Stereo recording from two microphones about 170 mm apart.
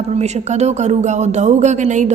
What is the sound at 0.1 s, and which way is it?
A woman's voice, 40° right (ahead or behind).